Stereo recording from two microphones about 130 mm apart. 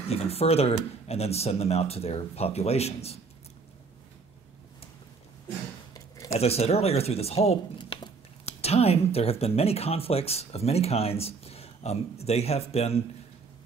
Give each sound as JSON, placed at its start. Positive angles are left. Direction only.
{"t": 0.1, "sound": "speech", "side_deg": 50}
{"t": 5.9, "sound": "a sound", "side_deg": 25}
{"t": 6.4, "sound": "speech", "side_deg": 50}
{"t": 8.5, "sound": "speech", "side_deg": 55}